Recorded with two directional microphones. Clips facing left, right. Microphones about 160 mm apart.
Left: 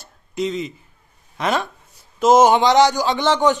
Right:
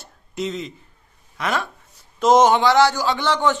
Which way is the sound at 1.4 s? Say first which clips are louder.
Left 3 dB; 20° left (ahead or behind).